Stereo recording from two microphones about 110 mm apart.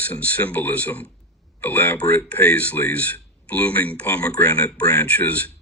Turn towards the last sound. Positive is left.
turn(degrees=15)  # may be behind; listen again after turning